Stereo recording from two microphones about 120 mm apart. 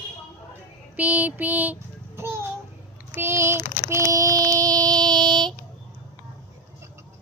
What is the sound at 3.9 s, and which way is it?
Child singing, 30° right (ahead or behind).